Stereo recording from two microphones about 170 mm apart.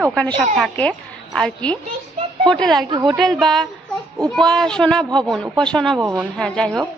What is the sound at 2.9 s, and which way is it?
Speech, 25° right (ahead or behind).